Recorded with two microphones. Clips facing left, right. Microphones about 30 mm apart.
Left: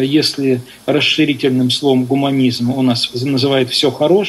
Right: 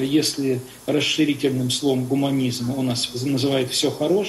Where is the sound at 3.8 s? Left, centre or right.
Left.